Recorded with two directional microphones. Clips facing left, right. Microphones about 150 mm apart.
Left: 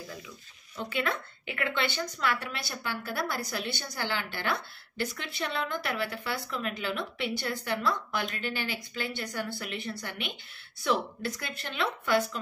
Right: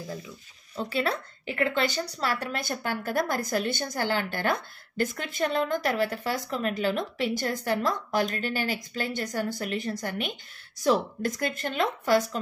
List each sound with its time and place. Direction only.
0.7 s a woman's voice: 35° right (ahead or behind)